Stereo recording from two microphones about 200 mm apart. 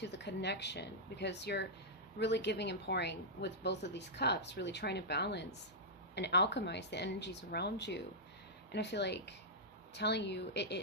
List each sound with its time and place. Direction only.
0.0 s speech: 60° left (ahead or behind)